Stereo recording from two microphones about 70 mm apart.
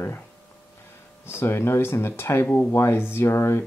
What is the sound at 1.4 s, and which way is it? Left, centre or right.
Speech, left.